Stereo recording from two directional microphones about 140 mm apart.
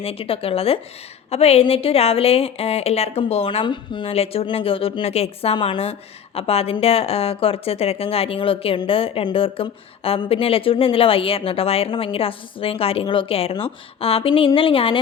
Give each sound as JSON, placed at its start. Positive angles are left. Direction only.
{"t": 0.0, "sound": "a woman's voice", "side_deg": 45}